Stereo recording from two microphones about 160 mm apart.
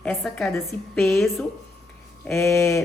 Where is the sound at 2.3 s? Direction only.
15° left (ahead or behind).